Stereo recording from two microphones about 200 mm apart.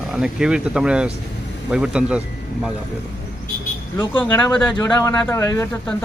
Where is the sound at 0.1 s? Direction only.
5° right (ahead or behind).